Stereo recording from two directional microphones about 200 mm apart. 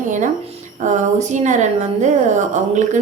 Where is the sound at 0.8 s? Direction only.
35° right (ahead or behind).